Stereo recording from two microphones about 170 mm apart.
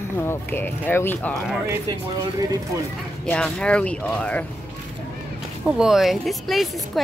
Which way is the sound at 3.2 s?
5° left (ahead or behind).